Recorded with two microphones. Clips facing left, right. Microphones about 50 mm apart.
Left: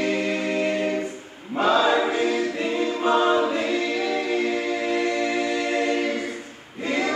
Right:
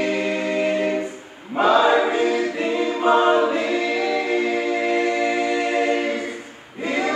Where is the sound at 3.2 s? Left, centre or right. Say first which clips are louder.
Right 3 dB; right.